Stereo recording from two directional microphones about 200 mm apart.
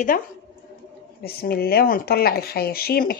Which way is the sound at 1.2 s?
50° left (ahead or behind).